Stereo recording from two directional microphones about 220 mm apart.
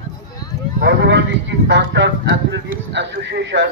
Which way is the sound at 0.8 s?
50° right (ahead or behind).